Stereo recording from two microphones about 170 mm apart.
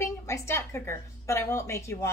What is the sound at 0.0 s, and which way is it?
A woman's voice, 15° left (ahead or behind).